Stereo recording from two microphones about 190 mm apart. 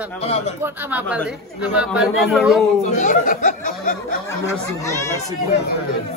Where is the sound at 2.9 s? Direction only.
40° left (ahead or behind).